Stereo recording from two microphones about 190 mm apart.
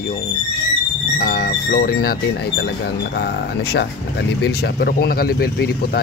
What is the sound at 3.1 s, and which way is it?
Speech, 60° left (ahead or behind).